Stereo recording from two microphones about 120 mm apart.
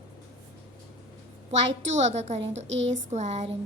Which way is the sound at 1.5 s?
70° right (ahead or behind).